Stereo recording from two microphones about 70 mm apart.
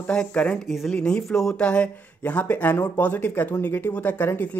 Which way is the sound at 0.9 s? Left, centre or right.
Centre.